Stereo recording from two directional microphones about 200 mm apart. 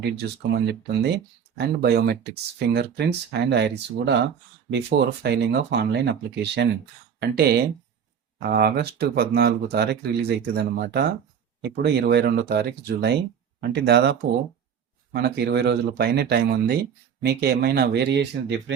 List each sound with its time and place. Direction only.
0.0 s speech: 55° right (ahead or behind)